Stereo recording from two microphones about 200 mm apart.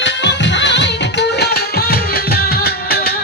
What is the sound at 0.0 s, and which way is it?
Music, 60° left (ahead or behind).